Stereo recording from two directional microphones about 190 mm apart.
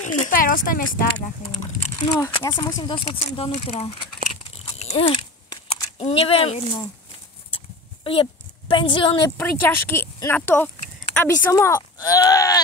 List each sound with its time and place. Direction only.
0.0 s speech: 45° left (ahead or behind)
2.1 s speech: 15° left (ahead or behind)
4.7 s a sound: 30° left (ahead or behind)
9.4 s speech: 10° left (ahead or behind)